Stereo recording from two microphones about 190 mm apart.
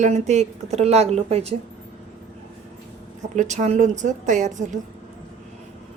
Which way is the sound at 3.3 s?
40° right (ahead or behind).